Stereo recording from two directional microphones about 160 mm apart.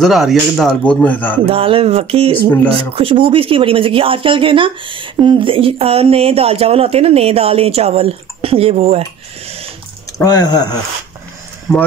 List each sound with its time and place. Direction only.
0.0 s speech: centre (ahead or behind)
1.4 s speech: 35° right (ahead or behind)
10.1 s speech: 25° left (ahead or behind)
11.7 s speech: 5° left (ahead or behind)